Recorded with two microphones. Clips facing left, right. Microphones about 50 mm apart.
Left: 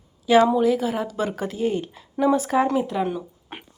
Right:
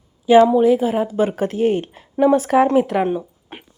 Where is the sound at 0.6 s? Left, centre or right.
Right.